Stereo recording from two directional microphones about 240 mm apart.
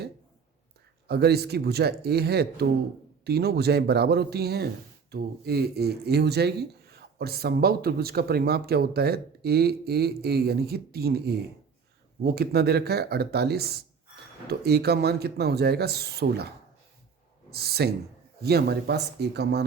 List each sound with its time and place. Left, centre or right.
1.0 s speech: right
17.5 s speech: right